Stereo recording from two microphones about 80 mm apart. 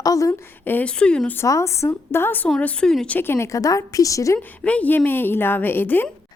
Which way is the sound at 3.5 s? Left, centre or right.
Left.